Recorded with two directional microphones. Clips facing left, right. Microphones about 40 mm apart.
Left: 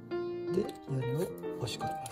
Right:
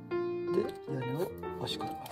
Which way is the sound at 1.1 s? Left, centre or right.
Left.